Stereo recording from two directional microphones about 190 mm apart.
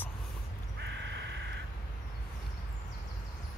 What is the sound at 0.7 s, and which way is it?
Crow, 60° right (ahead or behind).